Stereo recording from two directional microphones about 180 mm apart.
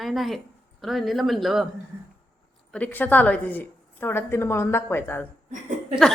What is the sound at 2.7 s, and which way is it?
A woman's voice, 10° left (ahead or behind).